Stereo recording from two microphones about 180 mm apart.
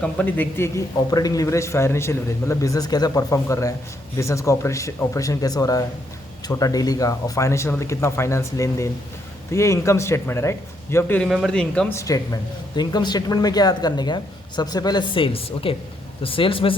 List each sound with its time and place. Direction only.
0.0 s speech: 10° left (ahead or behind)
11.9 s speech: 20° left (ahead or behind)